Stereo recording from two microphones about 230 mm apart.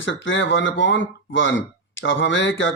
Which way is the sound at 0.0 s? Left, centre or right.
Left.